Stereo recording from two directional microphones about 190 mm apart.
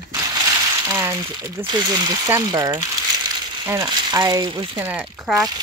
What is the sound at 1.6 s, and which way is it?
Speech, 25° right (ahead or behind).